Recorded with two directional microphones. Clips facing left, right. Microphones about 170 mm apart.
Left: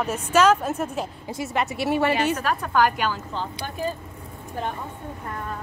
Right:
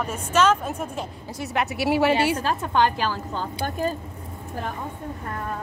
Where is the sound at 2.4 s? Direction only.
25° right (ahead or behind).